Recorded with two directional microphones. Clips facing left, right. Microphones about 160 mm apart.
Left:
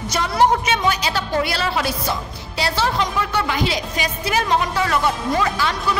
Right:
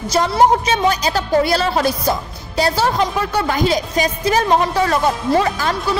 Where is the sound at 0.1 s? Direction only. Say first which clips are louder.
Right 4 dB; 30° right (ahead or behind).